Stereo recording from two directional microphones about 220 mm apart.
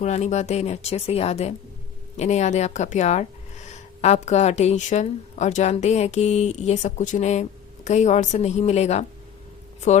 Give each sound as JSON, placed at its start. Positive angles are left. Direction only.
{"t": 0.0, "sound": "speech", "side_deg": 30}